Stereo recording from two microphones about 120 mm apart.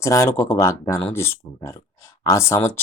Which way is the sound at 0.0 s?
25° left (ahead or behind).